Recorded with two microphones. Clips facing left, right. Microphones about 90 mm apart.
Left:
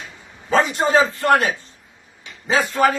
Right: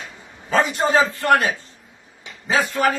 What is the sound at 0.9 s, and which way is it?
Speech, 30° left (ahead or behind).